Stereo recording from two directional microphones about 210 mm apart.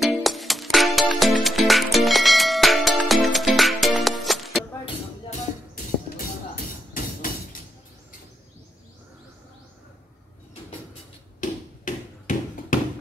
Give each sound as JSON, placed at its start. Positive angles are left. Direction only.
{"t": 0.0, "sound": "music", "side_deg": 0}
{"t": 6.0, "sound": "music", "side_deg": 40}
{"t": 11.4, "sound": "a sound", "side_deg": 40}